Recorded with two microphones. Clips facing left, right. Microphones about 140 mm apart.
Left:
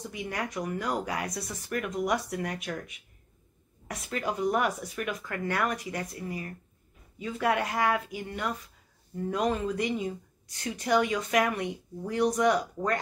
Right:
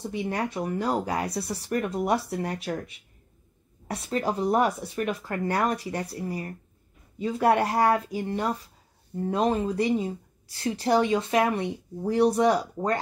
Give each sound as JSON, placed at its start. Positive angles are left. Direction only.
{"t": 0.0, "sound": "speech", "side_deg": -30}
{"t": 3.8, "sound": "speech", "side_deg": -30}